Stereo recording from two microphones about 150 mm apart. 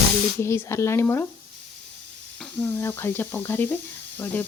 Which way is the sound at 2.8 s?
15° left (ahead or behind).